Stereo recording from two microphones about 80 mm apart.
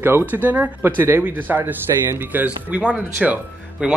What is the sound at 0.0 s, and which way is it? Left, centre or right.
Speech, right.